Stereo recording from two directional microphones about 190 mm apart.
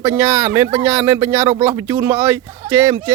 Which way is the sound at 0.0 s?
10° right (ahead or behind).